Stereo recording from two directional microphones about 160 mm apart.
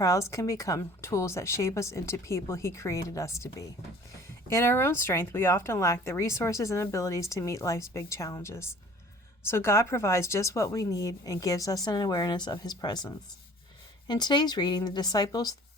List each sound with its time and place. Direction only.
0.0 s a woman's voice: 20° left (ahead or behind)